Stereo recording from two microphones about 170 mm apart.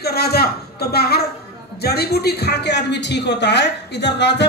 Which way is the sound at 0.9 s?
65° left (ahead or behind).